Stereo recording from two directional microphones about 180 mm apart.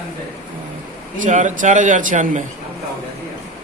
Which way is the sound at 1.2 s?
40° right (ahead or behind).